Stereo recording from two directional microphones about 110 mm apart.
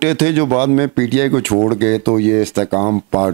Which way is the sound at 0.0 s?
10° right (ahead or behind).